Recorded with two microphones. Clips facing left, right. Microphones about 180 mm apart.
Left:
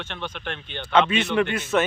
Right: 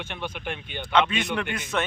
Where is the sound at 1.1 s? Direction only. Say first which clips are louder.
Left 5 dB; 5° left (ahead or behind).